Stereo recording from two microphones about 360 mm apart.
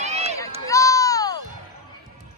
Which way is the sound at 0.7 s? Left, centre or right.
Centre.